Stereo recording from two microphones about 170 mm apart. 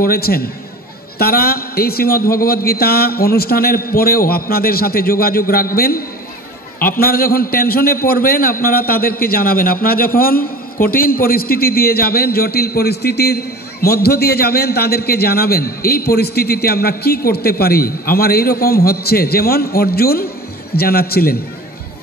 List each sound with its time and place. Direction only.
0.0 s a man's voice: 60° left (ahead or behind)